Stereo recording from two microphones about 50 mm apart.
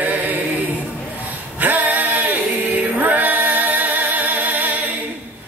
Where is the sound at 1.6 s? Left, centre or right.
Right.